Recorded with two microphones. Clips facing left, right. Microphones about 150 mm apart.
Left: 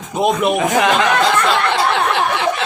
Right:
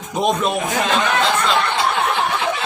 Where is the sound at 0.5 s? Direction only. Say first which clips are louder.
Left 5 dB; 90° left.